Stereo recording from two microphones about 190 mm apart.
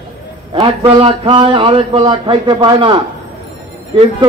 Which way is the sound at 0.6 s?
25° right (ahead or behind).